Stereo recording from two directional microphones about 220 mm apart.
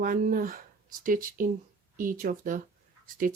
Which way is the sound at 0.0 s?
40° right (ahead or behind).